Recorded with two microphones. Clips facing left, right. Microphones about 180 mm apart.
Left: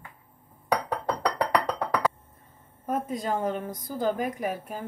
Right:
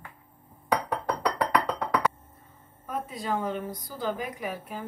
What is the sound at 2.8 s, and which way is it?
A woman's voice, 45° left (ahead or behind).